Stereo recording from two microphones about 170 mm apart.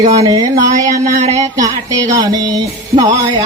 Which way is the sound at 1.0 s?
45° right (ahead or behind).